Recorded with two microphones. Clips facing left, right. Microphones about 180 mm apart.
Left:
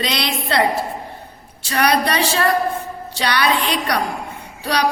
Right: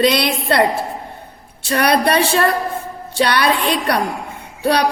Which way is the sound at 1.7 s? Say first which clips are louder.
Right 3 dB; 55° right (ahead or behind).